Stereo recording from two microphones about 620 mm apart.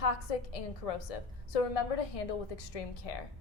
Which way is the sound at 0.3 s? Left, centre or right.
Left.